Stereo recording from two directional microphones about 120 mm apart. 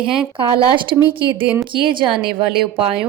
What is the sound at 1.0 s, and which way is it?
Speech, 45° right (ahead or behind).